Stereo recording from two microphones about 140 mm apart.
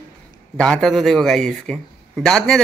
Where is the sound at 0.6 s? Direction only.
5° left (ahead or behind).